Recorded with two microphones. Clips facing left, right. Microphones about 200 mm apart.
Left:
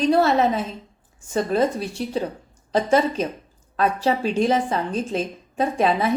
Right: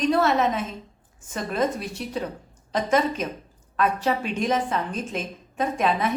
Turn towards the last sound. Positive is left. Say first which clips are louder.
# left 3 dB
turn(degrees=30)  # may be behind; listen again after turning